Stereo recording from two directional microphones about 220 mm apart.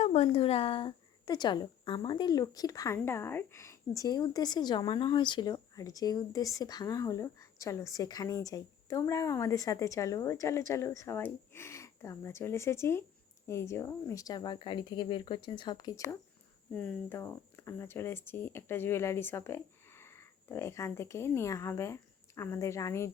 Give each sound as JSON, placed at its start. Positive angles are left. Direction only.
{"t": 0.0, "sound": "speech", "side_deg": 30}
{"t": 16.7, "sound": "speech", "side_deg": 5}